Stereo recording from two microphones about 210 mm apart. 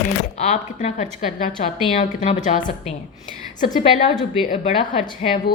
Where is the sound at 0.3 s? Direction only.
35° left (ahead or behind).